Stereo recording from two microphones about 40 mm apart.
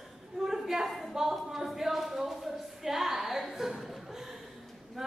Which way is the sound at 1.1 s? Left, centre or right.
Centre.